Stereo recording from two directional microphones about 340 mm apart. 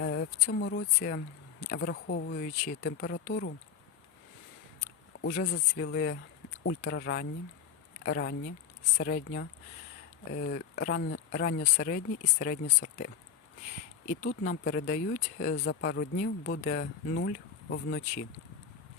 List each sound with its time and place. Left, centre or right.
0.0 s speech: left
5.2 s speech: left
14.3 s speech: left